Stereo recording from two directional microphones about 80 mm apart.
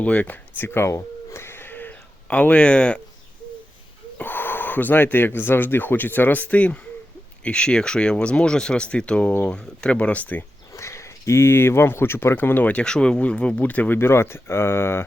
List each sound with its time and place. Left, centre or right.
0.0 s speech: centre
4.2 s speech: left
10.8 s speech: left